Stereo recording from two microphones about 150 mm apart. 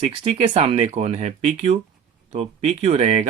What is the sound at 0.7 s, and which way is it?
Speech, 45° right (ahead or behind).